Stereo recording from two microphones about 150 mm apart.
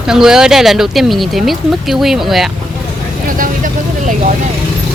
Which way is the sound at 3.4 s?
60° right (ahead or behind).